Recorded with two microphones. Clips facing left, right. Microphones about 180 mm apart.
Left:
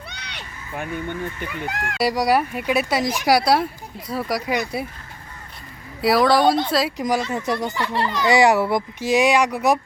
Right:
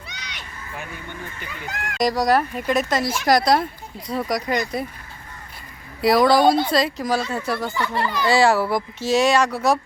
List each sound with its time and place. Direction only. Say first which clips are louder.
0.2 s a sound: even; 60° left (ahead or behind)
1.4 s speech: left 5 dB; 60° left (ahead or behind)
2.0 s speech: even; 10° left (ahead or behind)
6.0 s speech: right 1 dB; centre (ahead or behind)
6.9 s a child's voice: left 1 dB; 15° left (ahead or behind)